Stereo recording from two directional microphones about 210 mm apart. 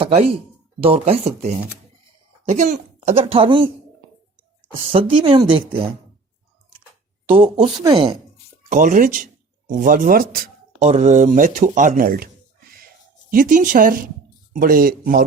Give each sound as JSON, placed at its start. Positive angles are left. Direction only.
{"t": 0.0, "sound": "speech", "side_deg": -30}
{"t": 4.9, "sound": "speech", "side_deg": -25}
{"t": 7.3, "sound": "speech", "side_deg": -25}
{"t": 8.7, "sound": "speech", "side_deg": -40}
{"t": 10.8, "sound": "speech", "side_deg": -35}